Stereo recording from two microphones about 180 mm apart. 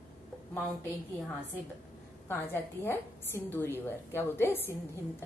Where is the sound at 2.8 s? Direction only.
15° left (ahead or behind).